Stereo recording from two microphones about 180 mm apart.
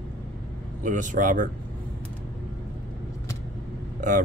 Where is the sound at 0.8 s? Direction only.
45° right (ahead or behind).